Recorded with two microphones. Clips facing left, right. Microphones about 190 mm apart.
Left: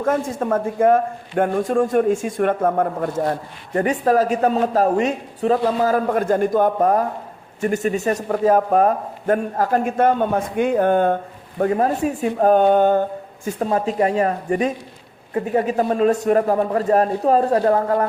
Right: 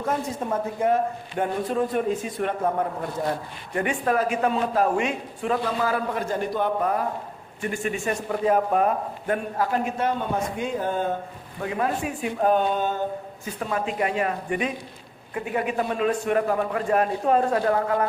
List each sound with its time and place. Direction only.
0.0 s a man's voice: 50° left (ahead or behind)
3.8 s a man's voice: 40° left (ahead or behind); by 11.2 s 60° left (ahead or behind)
11.6 s a man's voice: 40° left (ahead or behind)
13.4 s a man's voice: 40° left (ahead or behind)